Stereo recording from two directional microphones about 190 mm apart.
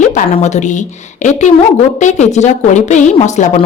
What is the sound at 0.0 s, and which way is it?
A woman's voice, 40° left (ahead or behind).